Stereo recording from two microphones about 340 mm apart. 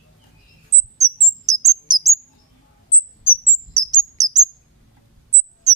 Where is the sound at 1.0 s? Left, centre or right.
Centre.